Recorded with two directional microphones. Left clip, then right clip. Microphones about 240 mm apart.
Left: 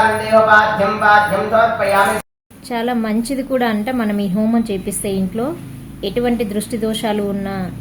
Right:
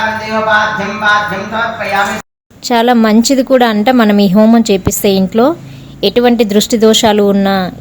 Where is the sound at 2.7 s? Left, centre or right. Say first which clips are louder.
Right 11 dB; right.